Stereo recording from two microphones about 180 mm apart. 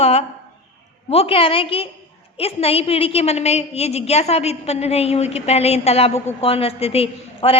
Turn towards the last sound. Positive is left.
turn(degrees=30)  # may be behind; listen again after turning